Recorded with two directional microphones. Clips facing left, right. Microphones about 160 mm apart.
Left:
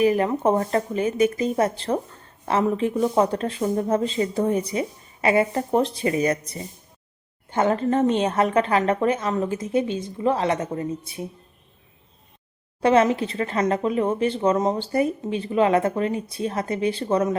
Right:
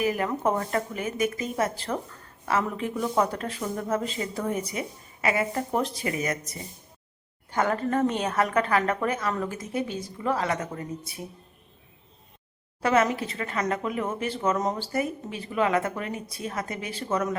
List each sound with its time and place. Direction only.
0.0 s speech: 30° left (ahead or behind)
12.8 s speech: 30° left (ahead or behind)